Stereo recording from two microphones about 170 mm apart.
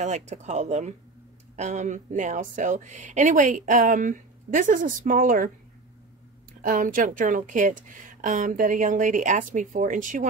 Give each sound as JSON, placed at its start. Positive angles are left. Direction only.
{"t": 0.0, "sound": "a woman's voice", "side_deg": -45}
{"t": 6.6, "sound": "a woman's voice", "side_deg": -50}